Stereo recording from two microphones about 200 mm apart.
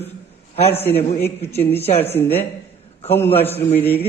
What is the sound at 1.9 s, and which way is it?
Speech, 30° left (ahead or behind).